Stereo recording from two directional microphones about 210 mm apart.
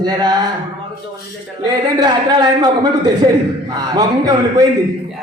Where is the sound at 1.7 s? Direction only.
20° right (ahead or behind).